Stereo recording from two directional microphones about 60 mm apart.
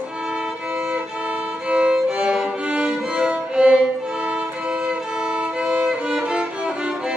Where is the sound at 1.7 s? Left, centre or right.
Centre.